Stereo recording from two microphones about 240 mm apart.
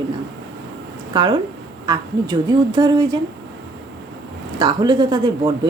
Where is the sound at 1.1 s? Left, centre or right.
Centre.